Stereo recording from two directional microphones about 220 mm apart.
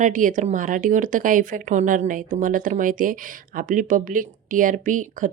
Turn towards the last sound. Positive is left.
turn(degrees=-35)  # may be behind; listen again after turning